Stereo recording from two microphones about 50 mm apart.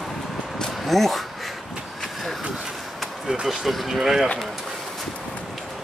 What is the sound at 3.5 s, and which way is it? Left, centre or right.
Speech, centre.